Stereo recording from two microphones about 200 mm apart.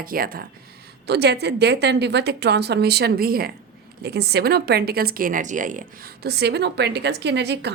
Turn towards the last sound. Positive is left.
turn(degrees=-55)  # may be behind; listen again after turning